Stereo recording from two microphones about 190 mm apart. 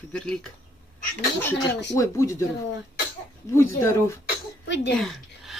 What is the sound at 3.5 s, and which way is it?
Speech, 15° left (ahead or behind).